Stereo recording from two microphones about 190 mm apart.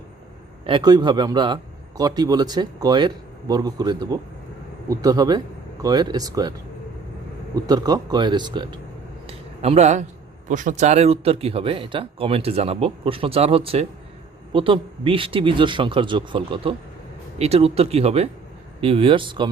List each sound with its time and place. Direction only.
0.7 s speech: 20° right (ahead or behind)
7.5 s speech: 20° right (ahead or behind)
9.2 s a sound: 30° right (ahead or behind)
10.5 s speech: 40° right (ahead or behind); by 19.5 s 25° right (ahead or behind)